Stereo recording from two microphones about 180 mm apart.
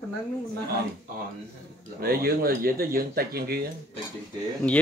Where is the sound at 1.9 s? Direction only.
55° right (ahead or behind).